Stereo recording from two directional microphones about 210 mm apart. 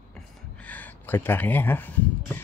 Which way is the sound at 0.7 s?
10° left (ahead or behind).